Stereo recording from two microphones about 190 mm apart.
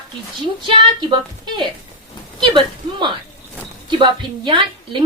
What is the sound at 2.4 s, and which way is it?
Speech, 25° right (ahead or behind).